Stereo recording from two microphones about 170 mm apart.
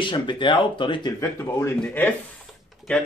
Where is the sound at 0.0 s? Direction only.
30° left (ahead or behind).